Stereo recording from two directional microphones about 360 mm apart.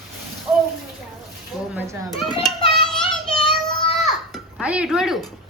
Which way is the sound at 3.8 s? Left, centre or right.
Centre.